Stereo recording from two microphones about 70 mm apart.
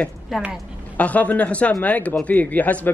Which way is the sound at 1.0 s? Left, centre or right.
Left.